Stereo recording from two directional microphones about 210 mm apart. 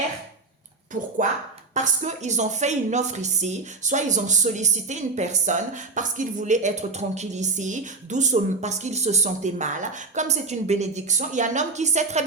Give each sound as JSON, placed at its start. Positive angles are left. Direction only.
{"t": 1.7, "sound": "a woman's voice", "side_deg": -35}